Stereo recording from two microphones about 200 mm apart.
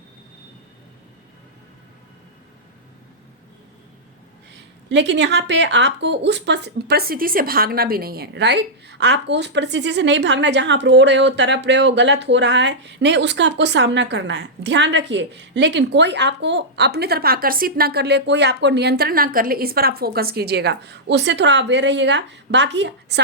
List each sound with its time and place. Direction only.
4.5 s a woman's voice: 60° right (ahead or behind)